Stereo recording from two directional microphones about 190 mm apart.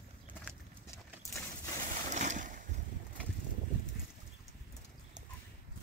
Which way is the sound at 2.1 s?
40° right (ahead or behind).